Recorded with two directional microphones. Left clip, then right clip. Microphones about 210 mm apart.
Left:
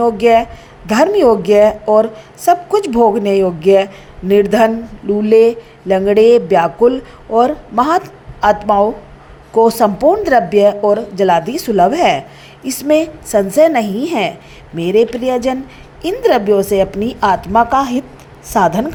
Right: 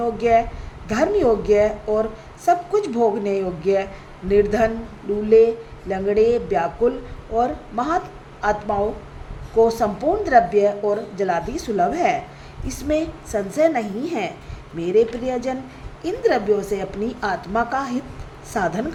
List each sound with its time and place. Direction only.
0.0 s a woman's voice: 35° left (ahead or behind)